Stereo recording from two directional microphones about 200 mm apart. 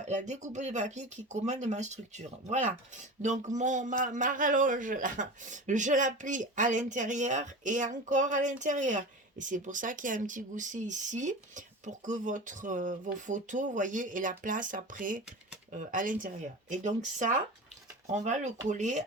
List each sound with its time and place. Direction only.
0.0 s a man's voice: 35° right (ahead or behind)